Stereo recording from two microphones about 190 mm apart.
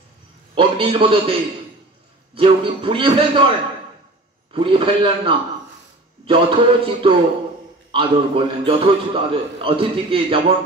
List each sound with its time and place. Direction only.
0.6 s a man's voice: 30° right (ahead or behind)
2.3 s a man's voice: 25° right (ahead or behind)